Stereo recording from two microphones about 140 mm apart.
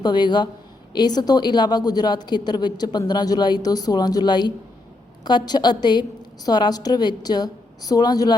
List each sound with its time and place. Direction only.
0.0 s a woman's voice: 30° left (ahead or behind)